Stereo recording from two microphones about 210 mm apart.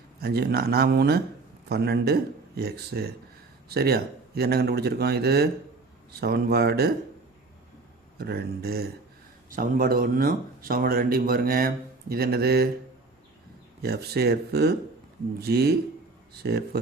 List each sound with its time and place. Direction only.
0.2 s speech: 50° right (ahead or behind)
8.2 s speech: 50° right (ahead or behind)
13.8 s speech: 50° right (ahead or behind)